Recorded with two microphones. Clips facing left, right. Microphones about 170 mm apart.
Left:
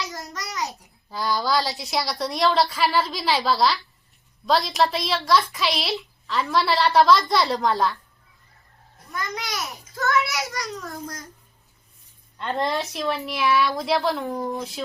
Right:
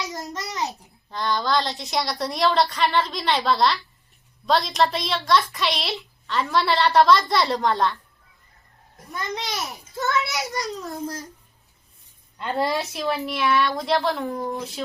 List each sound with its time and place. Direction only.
0.1 s babbling: 20° right (ahead or behind)
0.7 s a woman's voice: 5° left (ahead or behind)
9.1 s a child's voice: 20° right (ahead or behind)
12.4 s a woman's voice: 5° right (ahead or behind)